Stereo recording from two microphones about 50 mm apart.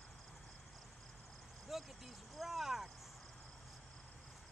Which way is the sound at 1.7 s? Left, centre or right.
Centre.